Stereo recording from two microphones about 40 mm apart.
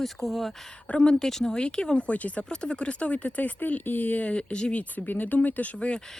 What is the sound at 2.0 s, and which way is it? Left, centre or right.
Speech, left.